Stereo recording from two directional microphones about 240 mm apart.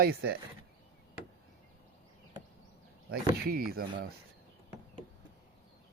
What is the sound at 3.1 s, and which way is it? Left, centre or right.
Speech, right.